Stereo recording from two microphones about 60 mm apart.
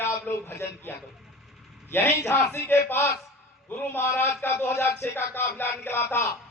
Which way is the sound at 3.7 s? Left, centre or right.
Left.